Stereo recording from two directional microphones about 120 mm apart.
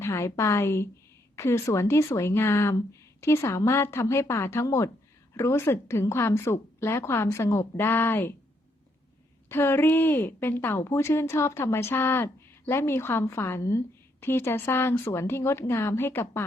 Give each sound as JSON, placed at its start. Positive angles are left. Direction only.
{"t": 0.0, "sound": "a woman's voice", "side_deg": 25}
{"t": 9.5, "sound": "a woman's voice", "side_deg": 20}